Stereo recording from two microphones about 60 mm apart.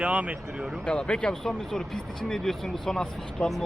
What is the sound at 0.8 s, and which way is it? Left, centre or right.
Speech, centre.